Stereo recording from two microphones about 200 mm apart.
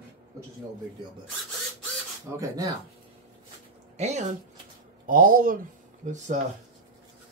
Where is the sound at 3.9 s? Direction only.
35° right (ahead or behind).